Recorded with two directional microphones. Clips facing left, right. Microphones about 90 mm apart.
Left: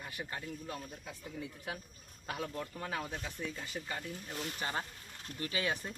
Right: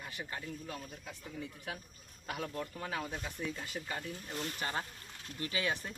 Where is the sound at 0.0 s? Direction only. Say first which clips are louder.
Even; 5° left (ahead or behind).